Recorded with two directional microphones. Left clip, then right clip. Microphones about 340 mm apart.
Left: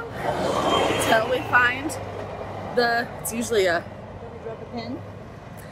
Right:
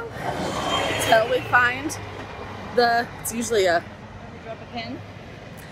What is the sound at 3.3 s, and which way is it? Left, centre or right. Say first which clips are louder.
Speech: right 1 dB; centre.